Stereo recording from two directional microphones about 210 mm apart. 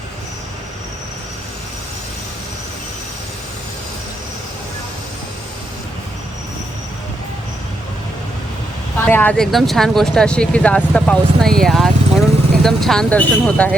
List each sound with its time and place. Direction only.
9.0 s speech: 5° left (ahead or behind)